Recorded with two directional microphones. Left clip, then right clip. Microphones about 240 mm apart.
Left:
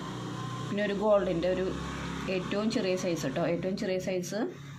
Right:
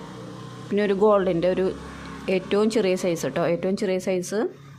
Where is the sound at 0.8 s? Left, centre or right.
Right.